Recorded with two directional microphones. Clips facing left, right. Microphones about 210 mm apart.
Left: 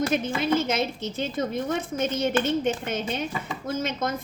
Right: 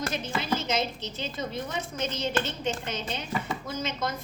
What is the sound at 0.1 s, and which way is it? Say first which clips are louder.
Speech: left 6 dB; 55° left (ahead or behind).